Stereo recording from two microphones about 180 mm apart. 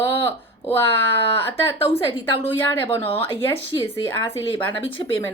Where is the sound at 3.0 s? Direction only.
30° left (ahead or behind).